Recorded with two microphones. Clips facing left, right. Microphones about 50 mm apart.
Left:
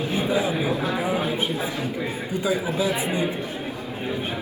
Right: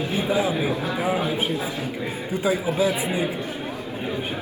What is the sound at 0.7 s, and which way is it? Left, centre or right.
Speech, left.